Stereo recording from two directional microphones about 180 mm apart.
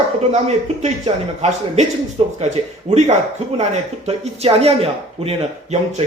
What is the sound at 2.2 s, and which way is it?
Speech, 35° right (ahead or behind).